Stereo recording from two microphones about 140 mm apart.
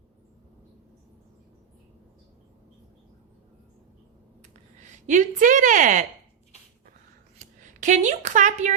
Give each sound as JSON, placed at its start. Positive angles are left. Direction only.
{"t": 4.8, "sound": "a woman's voice", "side_deg": -65}
{"t": 7.3, "sound": "speech", "side_deg": -60}